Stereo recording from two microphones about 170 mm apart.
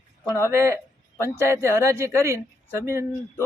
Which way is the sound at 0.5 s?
15° right (ahead or behind).